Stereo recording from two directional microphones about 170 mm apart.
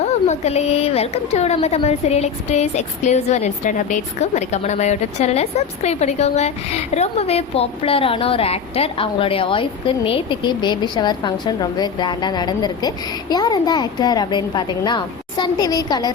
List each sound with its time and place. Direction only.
0.0 s a woman's voice: 40° left (ahead or behind); by 16.1 s 25° left (ahead or behind)